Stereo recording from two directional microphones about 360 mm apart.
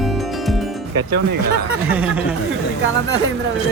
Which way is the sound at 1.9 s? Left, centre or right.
Centre.